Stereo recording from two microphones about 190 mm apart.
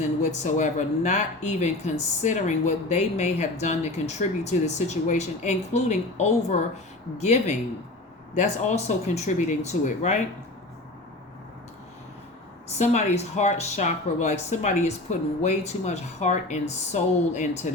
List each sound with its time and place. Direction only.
0.2 s speech: 40° left (ahead or behind)
12.8 s speech: 35° left (ahead or behind)